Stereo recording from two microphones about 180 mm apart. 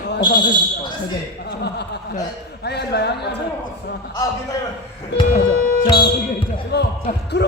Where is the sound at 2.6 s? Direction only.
65° left (ahead or behind).